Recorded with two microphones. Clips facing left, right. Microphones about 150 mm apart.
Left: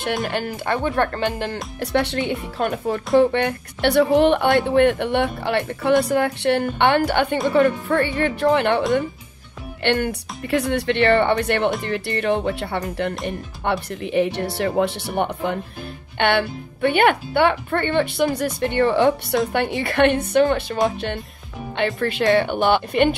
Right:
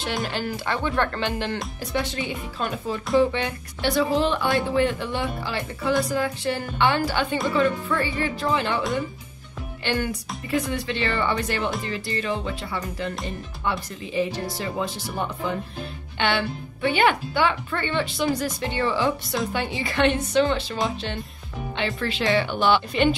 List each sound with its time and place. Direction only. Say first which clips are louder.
0.7 s speech: left 4 dB; 50° left (ahead or behind)
1.8 s speech: left 10 dB; 70° left (ahead or behind)
9.8 s speech: left 5 dB; 65° left (ahead or behind)
21.7 s speech: left 6 dB; 50° left (ahead or behind)